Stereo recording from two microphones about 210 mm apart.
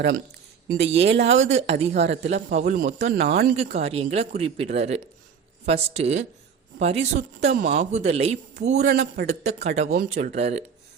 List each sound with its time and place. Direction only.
1.0 s speech: 55° right (ahead or behind)
1.3 s speech: 35° right (ahead or behind)